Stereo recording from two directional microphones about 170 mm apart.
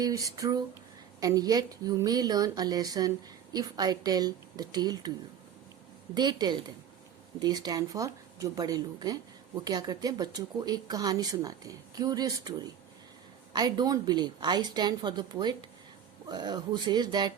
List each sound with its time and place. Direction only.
0.0 s speech: 20° right (ahead or behind)
6.1 s speech: 25° right (ahead or behind)